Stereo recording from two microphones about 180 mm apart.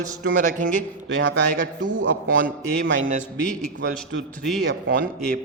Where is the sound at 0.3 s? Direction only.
50° right (ahead or behind).